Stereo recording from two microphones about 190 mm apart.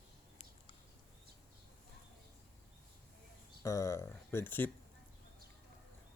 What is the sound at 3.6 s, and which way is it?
Speech, 15° left (ahead or behind).